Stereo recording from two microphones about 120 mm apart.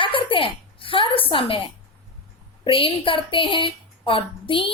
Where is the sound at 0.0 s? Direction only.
45° left (ahead or behind).